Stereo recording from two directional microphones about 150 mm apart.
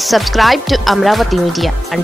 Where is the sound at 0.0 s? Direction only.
Centre (ahead or behind).